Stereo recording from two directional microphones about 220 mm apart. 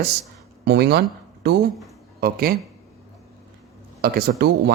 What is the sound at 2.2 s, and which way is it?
Speech, 45° right (ahead or behind).